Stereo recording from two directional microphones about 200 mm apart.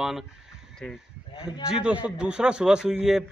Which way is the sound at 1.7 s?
5° right (ahead or behind).